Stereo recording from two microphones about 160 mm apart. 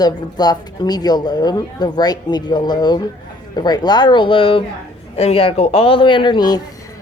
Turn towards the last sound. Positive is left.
turn(degrees=25)  # may be behind; listen again after turning